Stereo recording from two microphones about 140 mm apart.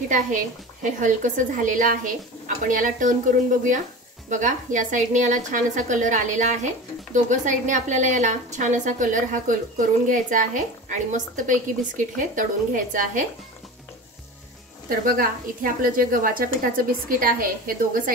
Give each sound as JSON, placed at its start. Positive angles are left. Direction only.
{"t": 0.8, "sound": "a woman's voice", "side_deg": -65}
{"t": 14.9, "sound": "a woman's voice", "side_deg": -85}